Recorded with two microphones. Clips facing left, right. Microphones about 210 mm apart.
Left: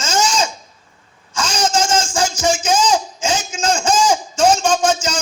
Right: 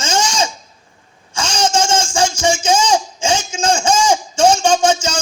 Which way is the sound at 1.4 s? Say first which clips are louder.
Right 1 dB; 30° right (ahead or behind).